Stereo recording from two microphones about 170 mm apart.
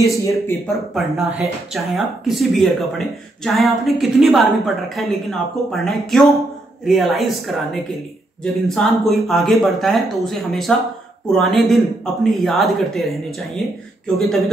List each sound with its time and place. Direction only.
0.0 s speech: 20° left (ahead or behind)
0.9 s a woman's voice: centre (ahead or behind)